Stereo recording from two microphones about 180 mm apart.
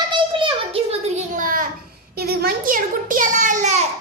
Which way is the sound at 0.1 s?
30° right (ahead or behind).